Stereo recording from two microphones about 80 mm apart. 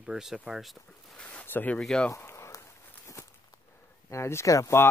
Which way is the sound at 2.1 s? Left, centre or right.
Left.